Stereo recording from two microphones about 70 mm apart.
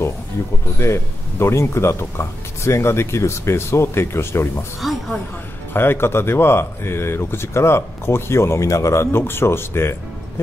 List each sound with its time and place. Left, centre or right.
0.7 s speech: left
4.8 s speech: centre
5.7 s speech: left